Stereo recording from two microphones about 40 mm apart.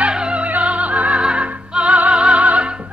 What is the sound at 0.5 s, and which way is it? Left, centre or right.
Music, right.